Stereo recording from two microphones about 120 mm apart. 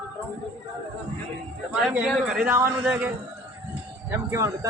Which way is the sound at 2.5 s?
20° right (ahead or behind).